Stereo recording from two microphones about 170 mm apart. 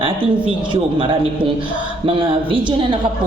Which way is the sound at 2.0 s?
30° right (ahead or behind).